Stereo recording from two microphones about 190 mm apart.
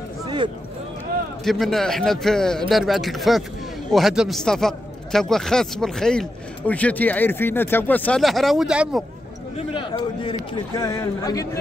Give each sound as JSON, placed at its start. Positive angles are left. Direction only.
{"t": 0.2, "sound": "a sound", "side_deg": -20}
{"t": 1.4, "sound": "a man's voice", "side_deg": 0}
{"t": 9.7, "sound": "speech", "side_deg": 25}
{"t": 10.8, "sound": "speech", "side_deg": 15}